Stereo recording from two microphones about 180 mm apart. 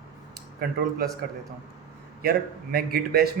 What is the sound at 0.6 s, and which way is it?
Speech, 60° right (ahead or behind).